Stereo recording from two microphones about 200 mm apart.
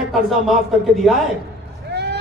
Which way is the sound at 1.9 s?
55° right (ahead or behind).